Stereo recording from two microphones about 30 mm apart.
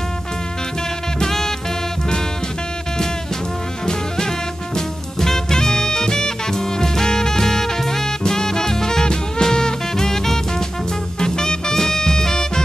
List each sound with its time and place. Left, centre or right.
1.2 s music: centre
4.7 s music: centre
11.1 s swing music: left